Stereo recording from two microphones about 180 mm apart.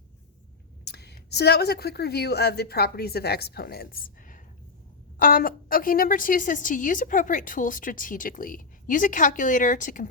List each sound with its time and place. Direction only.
0.9 s a woman's voice: 65° left (ahead or behind); by 10.1 s 45° left (ahead or behind)